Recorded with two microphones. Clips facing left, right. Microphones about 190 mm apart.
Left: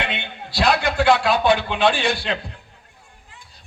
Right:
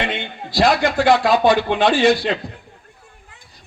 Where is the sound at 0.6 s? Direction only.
50° right (ahead or behind).